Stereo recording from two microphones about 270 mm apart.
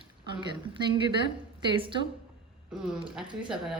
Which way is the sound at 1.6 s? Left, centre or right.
Centre.